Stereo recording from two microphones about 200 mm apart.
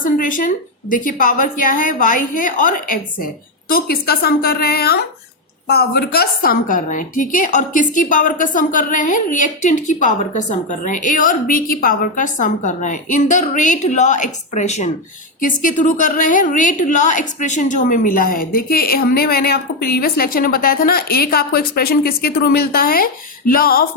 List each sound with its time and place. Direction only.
0.0 s a woman's voice: 40° left (ahead or behind)